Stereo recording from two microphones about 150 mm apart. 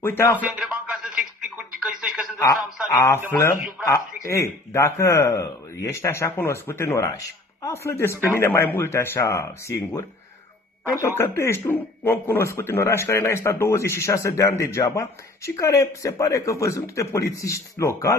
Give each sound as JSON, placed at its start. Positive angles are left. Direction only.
{"t": 0.0, "sound": "speech", "side_deg": 15}
{"t": 0.4, "sound": "a sound", "side_deg": -5}
{"t": 2.9, "sound": "speech", "side_deg": 20}